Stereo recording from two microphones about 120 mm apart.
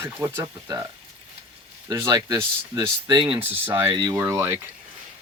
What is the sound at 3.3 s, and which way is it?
Speech, 15° right (ahead or behind).